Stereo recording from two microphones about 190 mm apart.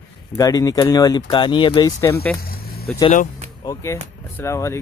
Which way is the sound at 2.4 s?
50° left (ahead or behind).